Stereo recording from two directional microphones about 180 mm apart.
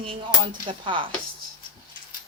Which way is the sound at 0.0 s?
30° right (ahead or behind).